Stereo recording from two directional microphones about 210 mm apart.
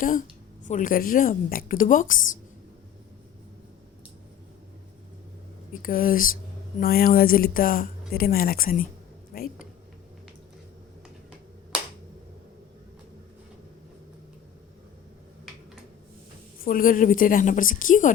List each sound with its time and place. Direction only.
0.0 s a woman's voice: 40° left (ahead or behind)
5.8 s speech: 40° left (ahead or behind)
16.6 s a woman's voice: 40° left (ahead or behind)